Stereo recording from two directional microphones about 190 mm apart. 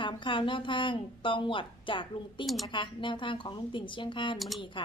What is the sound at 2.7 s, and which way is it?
A woman's voice, 25° left (ahead or behind).